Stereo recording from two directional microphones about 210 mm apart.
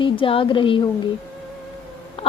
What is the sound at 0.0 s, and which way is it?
Speech, 25° left (ahead or behind).